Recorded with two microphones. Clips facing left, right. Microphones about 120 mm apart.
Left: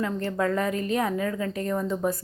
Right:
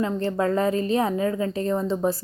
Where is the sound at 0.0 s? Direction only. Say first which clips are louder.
Right 3 dB; 30° right (ahead or behind).